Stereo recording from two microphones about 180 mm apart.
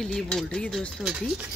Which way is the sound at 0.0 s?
5° left (ahead or behind).